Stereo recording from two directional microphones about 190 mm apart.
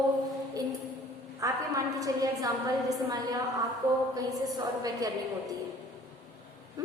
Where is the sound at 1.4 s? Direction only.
20° right (ahead or behind).